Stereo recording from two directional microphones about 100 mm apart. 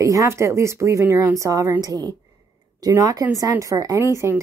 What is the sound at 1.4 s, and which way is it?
Speech, 30° right (ahead or behind).